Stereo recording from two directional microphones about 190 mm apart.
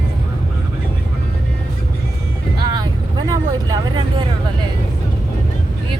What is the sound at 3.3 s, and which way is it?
Speech, 20° right (ahead or behind).